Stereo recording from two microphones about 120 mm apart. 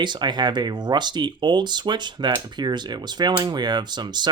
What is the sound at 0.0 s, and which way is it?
Speech, 40° right (ahead or behind).